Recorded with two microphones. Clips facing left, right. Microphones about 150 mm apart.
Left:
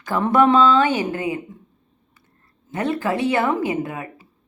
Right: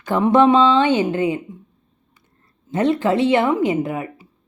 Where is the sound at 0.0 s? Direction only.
20° right (ahead or behind).